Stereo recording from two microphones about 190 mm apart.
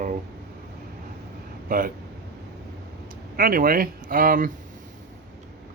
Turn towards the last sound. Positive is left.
turn(degrees=-45)  # may be behind; listen again after turning